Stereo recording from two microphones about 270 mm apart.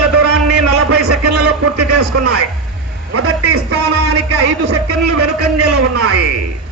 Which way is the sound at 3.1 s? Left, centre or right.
Right.